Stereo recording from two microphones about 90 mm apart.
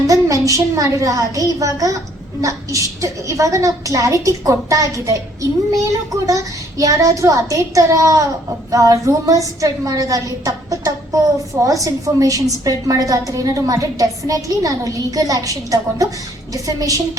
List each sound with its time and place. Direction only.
0.1 s a child's voice: 40° right (ahead or behind)